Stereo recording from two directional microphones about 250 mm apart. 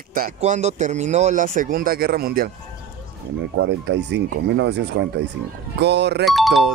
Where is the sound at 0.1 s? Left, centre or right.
Right.